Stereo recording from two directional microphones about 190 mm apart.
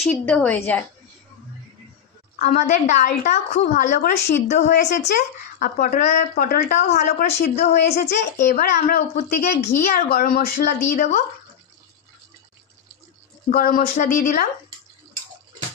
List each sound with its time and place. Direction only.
0.1 s a woman's voice: 5° left (ahead or behind)
2.3 s speech: 40° left (ahead or behind)
8.0 s speech: 55° left (ahead or behind)
13.5 s speech: 45° left (ahead or behind)